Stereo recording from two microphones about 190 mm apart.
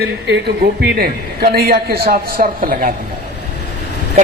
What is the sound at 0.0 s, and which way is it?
A man's voice, 60° right (ahead or behind).